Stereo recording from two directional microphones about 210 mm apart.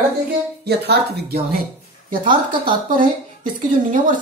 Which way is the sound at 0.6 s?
50° right (ahead or behind).